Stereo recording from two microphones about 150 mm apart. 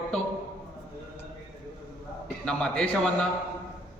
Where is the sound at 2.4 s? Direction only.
10° left (ahead or behind).